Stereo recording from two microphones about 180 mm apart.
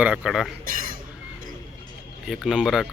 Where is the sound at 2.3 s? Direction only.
5° right (ahead or behind).